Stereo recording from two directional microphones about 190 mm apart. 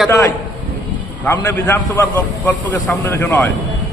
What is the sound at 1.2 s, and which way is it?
A man's voice, 10° left (ahead or behind).